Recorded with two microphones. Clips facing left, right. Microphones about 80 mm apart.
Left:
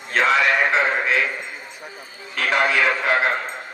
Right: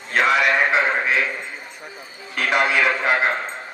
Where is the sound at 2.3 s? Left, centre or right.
Centre.